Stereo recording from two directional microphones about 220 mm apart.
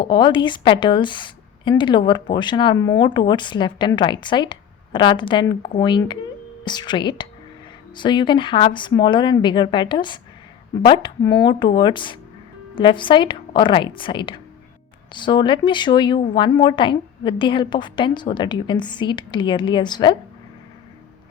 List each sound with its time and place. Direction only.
0.0 s a woman's voice: 20° left (ahead or behind)